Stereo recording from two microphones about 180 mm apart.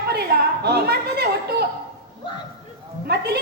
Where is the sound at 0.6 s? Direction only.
60° right (ahead or behind).